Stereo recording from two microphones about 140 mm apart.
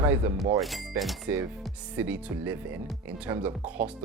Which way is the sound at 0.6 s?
Centre (ahead or behind).